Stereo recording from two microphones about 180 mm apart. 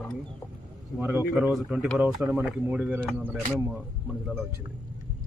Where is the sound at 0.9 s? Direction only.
10° right (ahead or behind).